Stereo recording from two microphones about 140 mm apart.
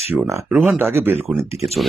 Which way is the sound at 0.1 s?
15° right (ahead or behind).